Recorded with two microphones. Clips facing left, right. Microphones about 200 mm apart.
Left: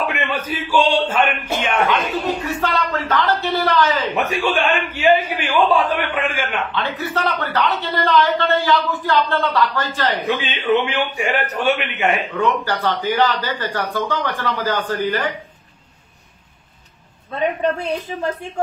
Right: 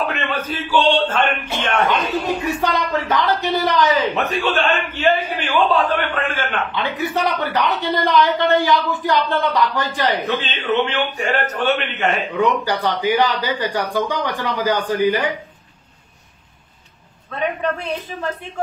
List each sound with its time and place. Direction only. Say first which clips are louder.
0.0 s a man's voice: even; 15° left (ahead or behind)
1.9 s speech: even; 15° right (ahead or behind)
4.1 s a man's voice: left 1 dB; 10° left (ahead or behind)
6.7 s speech: right 1 dB; 15° right (ahead or behind)
10.2 s a man's voice: left 2 dB; 15° left (ahead or behind)
12.4 s speech: right 1 dB; 15° right (ahead or behind)